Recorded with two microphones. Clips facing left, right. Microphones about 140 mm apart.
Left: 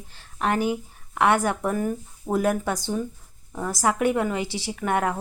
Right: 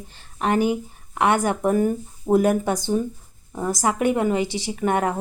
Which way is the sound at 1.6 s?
20° right (ahead or behind).